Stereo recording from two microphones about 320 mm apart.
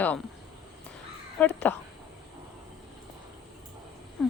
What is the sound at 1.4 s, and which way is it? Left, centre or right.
Speech, centre.